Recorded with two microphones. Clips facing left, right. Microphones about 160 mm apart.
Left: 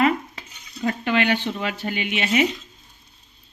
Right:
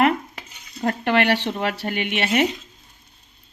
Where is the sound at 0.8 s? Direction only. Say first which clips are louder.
Right 2 dB; 55° right (ahead or behind).